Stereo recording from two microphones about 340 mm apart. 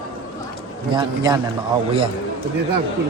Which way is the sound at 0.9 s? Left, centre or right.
Centre.